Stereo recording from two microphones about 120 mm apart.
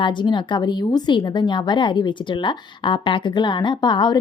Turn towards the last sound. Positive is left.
turn(degrees=40)  # may be behind; listen again after turning